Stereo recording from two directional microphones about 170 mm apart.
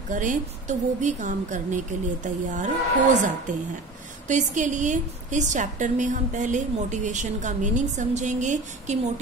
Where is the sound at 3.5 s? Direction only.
50° right (ahead or behind).